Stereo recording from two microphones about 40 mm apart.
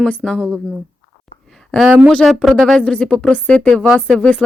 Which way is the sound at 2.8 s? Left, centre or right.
Left.